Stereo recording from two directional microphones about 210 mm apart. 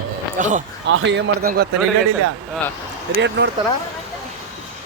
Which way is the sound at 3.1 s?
55° right (ahead or behind).